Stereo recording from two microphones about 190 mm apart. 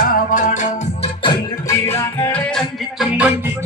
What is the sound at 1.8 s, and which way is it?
Music, 15° left (ahead or behind).